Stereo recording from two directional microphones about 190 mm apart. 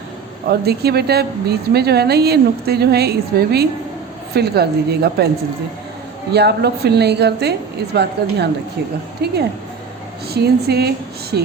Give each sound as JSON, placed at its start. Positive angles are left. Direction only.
{"t": 0.4, "sound": "a woman's voice", "side_deg": -55}
{"t": 6.3, "sound": "a woman's voice", "side_deg": -60}
{"t": 9.2, "sound": "a woman's voice", "side_deg": -60}